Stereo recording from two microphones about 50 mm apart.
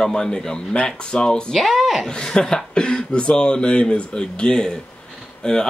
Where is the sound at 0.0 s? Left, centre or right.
Centre.